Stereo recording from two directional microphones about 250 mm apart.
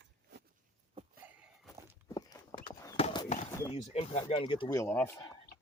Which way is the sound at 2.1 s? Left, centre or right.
Centre.